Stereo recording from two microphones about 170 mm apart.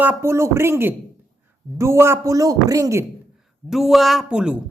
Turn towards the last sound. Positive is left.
turn(degrees=-5)  # may be behind; listen again after turning